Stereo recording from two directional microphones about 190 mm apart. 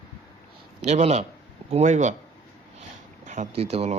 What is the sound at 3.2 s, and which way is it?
Speech, 40° right (ahead or behind).